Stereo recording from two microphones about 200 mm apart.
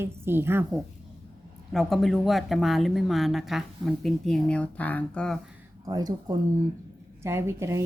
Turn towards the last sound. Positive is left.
turn(degrees=-15)  # may be behind; listen again after turning